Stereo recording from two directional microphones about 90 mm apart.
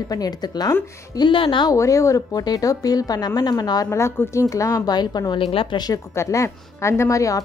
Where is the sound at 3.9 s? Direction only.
30° left (ahead or behind).